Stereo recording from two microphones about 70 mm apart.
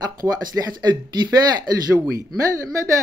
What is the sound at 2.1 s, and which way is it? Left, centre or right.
Speech, right.